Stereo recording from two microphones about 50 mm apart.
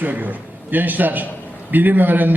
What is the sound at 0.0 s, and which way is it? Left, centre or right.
A man's voice, right.